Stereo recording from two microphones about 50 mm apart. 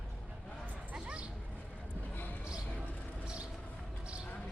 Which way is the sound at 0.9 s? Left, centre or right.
Right.